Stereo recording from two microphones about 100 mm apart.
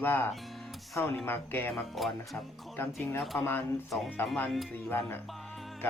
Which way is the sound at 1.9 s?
Centre (ahead or behind).